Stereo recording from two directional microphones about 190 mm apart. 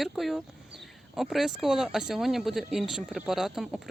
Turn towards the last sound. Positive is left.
turn(degrees=0)  # may be behind; listen again after turning